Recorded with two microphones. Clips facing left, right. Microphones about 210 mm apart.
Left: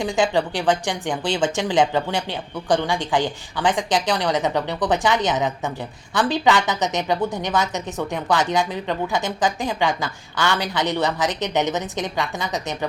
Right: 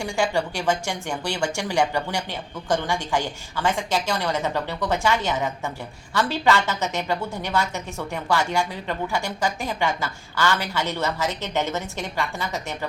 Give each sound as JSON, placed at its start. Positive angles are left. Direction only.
{"t": 0.0, "sound": "a woman's voice", "side_deg": 15}